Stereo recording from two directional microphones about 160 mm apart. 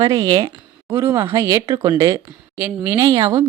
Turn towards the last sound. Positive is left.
turn(degrees=-20)  # may be behind; listen again after turning